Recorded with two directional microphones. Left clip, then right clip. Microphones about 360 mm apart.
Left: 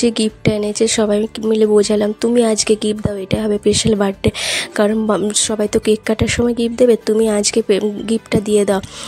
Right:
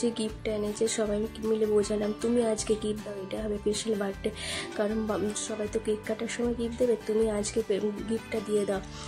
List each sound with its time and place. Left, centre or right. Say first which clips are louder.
0.0 s speech: left 14 dB; left